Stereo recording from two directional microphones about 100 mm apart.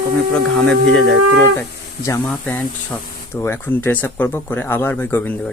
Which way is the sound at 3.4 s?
20° left (ahead or behind).